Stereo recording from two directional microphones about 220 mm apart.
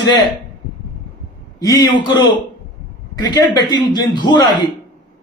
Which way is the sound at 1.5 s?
15° left (ahead or behind).